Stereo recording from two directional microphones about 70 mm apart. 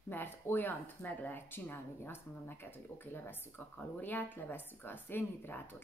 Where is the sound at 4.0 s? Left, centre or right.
Left.